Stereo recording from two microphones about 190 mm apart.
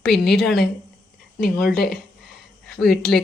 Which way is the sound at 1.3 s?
55° left (ahead or behind).